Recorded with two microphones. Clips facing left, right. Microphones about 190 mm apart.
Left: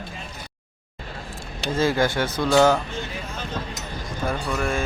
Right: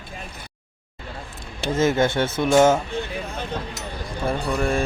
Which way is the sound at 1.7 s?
20° right (ahead or behind).